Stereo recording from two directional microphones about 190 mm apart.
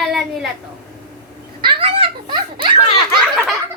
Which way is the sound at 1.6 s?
25° right (ahead or behind).